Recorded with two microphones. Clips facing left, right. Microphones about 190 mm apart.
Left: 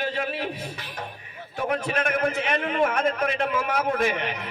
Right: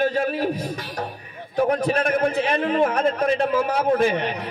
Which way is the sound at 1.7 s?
35° right (ahead or behind).